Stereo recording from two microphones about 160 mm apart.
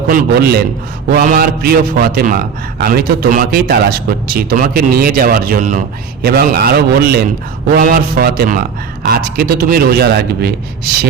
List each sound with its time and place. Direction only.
0.1 s a man's voice: 80° right
1.1 s a man's voice: 65° right (ahead or behind)
6.2 s a man's voice: 75° right (ahead or behind)